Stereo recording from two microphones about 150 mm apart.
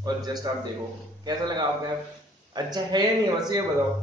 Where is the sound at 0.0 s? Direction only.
25° right (ahead or behind).